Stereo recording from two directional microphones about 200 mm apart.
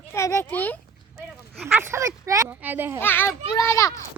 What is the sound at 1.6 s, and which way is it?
A child's voice, 10° right (ahead or behind).